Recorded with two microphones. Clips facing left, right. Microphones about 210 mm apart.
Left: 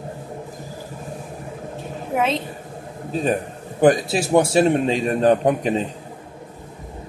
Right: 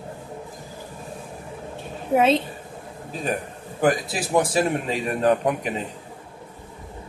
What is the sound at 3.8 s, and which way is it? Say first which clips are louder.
A man's voice: left 6 dB; 25° left (ahead or behind).